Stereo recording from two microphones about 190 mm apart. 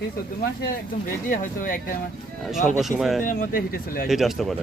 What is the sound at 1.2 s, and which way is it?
Speech, 45° left (ahead or behind).